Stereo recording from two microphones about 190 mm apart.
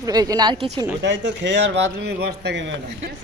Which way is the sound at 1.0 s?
70° right (ahead or behind).